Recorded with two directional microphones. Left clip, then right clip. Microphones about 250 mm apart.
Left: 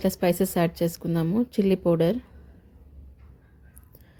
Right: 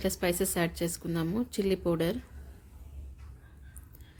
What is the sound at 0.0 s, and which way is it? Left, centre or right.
A woman's voice, centre.